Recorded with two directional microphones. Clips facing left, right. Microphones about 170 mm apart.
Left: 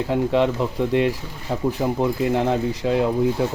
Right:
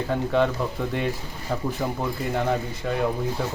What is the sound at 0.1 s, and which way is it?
Speech, 20° left (ahead or behind).